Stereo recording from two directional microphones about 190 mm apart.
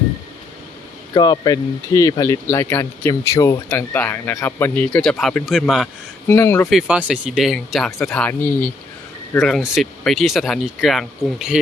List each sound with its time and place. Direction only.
1.1 s speech: 20° left (ahead or behind); by 5.9 s centre (ahead or behind)
6.2 s speech: 10° left (ahead or behind)
6.7 s speech: 5° right (ahead or behind)